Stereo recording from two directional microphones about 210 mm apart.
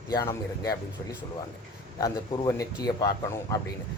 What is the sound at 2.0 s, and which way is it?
Speech, 15° left (ahead or behind).